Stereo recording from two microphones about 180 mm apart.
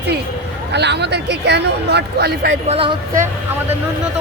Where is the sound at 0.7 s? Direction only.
70° right (ahead or behind).